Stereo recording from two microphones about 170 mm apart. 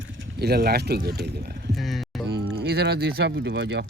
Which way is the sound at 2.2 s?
75° right (ahead or behind).